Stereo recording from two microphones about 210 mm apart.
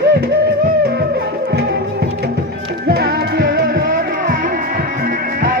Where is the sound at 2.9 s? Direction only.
50° right (ahead or behind).